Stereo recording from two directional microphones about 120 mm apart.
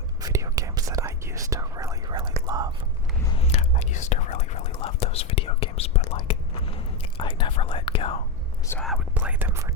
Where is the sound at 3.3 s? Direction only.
60° left (ahead or behind).